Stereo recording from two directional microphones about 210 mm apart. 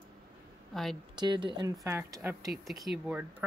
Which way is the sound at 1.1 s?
20° right (ahead or behind).